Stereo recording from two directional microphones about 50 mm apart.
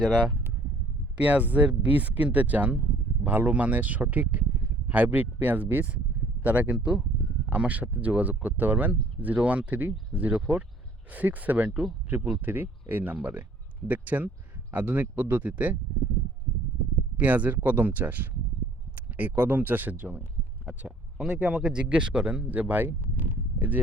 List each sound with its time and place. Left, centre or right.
0.0 s speech: centre
1.2 s speech: right
6.7 s speech: centre
17.2 s speech: right
20.7 s speech: right